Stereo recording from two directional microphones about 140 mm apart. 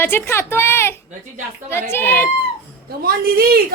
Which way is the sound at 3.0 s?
90° right.